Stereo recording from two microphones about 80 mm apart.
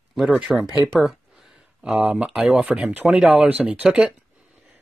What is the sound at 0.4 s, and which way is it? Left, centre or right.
Speech, centre.